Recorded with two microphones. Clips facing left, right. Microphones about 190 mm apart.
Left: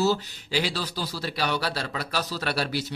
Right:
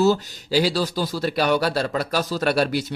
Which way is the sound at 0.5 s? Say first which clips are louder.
Right 8 dB; 40° right (ahead or behind).